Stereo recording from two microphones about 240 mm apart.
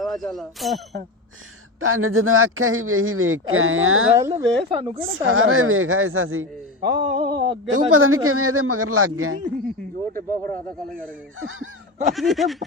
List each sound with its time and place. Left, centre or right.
0.0 s speech: centre
1.8 s a man's voice: right
4.2 s speech: centre
4.7 s a sound: right
5.0 s a man's voice: right
6.8 s a sound: right
7.7 s a man's voice: right
10.2 s speech: centre
11.3 s a man's voice: right
12.1 s a sound: centre